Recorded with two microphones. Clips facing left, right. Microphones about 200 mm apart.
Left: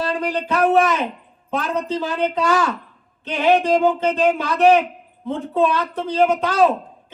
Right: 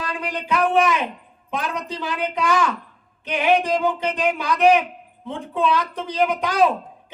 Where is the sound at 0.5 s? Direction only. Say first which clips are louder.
Left 3 dB; 40° left (ahead or behind).